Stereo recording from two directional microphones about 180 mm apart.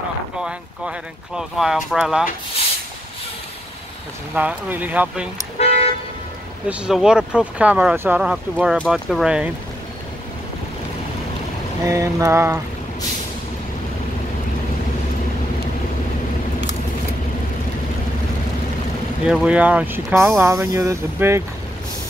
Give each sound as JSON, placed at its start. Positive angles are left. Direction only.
{"t": 0.4, "sound": "speech", "side_deg": -5}
{"t": 4.4, "sound": "speech", "side_deg": -10}
{"t": 5.6, "sound": "toot", "side_deg": 35}
{"t": 6.7, "sound": "speech", "side_deg": -5}
{"t": 11.8, "sound": "speech", "side_deg": -20}
{"t": 19.2, "sound": "speech", "side_deg": -5}